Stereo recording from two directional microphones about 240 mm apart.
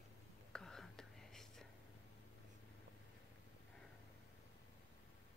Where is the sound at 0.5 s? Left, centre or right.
Centre.